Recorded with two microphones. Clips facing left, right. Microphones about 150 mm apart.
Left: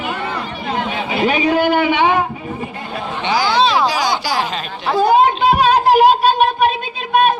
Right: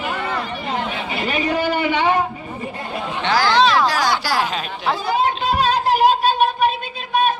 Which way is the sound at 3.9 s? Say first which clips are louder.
Left 1 dB; centre (ahead or behind).